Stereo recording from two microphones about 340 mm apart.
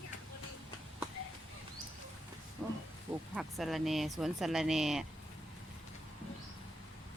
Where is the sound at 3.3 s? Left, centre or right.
Centre.